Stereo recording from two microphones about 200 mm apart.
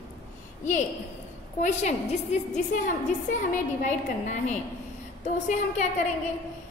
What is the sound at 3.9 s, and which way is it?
Speech, 35° left (ahead or behind).